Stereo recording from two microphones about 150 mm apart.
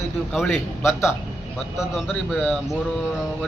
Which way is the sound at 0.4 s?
15° left (ahead or behind).